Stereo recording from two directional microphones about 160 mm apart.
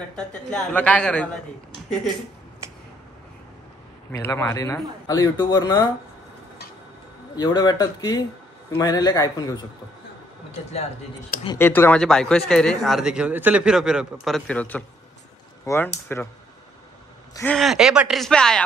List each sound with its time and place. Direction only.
0.1 s speech: 5° left (ahead or behind)
4.1 s speech: 15° left (ahead or behind)
7.3 s speech: 25° left (ahead or behind)
11.5 s a man's voice: 15° left (ahead or behind)
17.6 s a man's voice: centre (ahead or behind)